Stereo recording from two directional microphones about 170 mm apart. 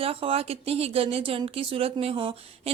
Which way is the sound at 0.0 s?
35° right (ahead or behind).